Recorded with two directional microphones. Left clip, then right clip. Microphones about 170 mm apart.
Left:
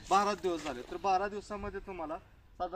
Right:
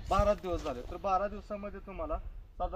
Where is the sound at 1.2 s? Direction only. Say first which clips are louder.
Right 1 dB; 50° right (ahead or behind).